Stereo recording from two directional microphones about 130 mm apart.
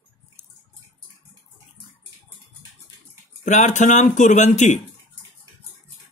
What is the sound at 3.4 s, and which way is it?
Speech, 70° left (ahead or behind).